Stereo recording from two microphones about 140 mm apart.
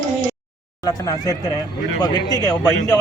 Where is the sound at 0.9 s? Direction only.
25° left (ahead or behind).